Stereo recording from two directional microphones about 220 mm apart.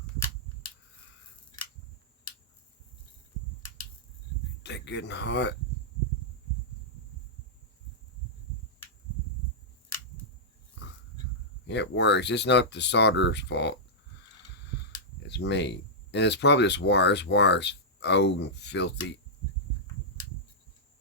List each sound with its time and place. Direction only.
4.6 s speech: 50° left (ahead or behind)
11.6 s speech: 50° left (ahead or behind)
15.4 s speech: 50° left (ahead or behind)